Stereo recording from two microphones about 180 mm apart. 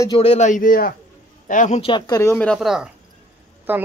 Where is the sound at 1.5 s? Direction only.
45° left (ahead or behind).